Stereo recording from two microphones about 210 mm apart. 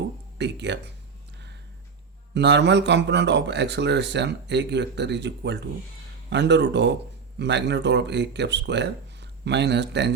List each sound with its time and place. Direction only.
0.3 s speech: 55° right (ahead or behind)
2.3 s a man's voice: 55° right (ahead or behind)